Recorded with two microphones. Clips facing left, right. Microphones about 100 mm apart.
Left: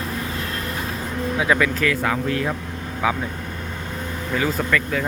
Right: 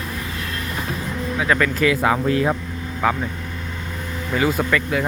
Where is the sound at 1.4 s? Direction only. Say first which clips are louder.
Even; 10° left (ahead or behind).